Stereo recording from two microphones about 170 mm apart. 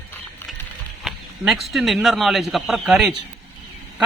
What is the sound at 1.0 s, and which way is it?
Speech, centre (ahead or behind).